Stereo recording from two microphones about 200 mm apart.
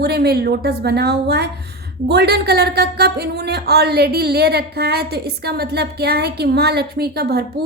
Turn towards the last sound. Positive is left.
turn(degrees=-55)  # may be behind; listen again after turning